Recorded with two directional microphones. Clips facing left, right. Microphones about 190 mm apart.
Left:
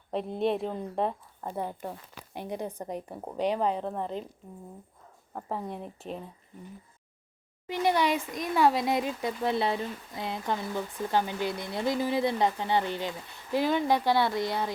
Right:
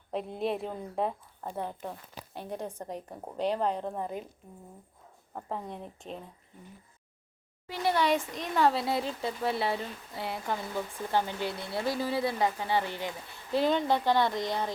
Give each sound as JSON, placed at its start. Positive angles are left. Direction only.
{"t": 0.1, "sound": "a woman's voice", "side_deg": 0}
{"t": 5.3, "sound": "a woman's voice", "side_deg": 5}
{"t": 7.7, "sound": "speech", "side_deg": 15}